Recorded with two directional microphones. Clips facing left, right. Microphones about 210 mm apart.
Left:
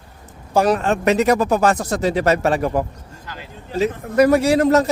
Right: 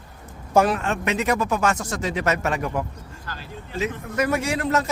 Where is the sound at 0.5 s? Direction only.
35° left (ahead or behind).